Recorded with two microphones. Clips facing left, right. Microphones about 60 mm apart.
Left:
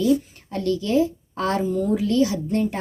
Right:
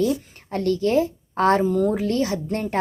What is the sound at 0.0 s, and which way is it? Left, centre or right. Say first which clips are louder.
Speech: left 2 dB; right.